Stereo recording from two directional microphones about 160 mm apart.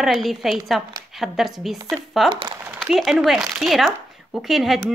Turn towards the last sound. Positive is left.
turn(degrees=0)  # may be behind; listen again after turning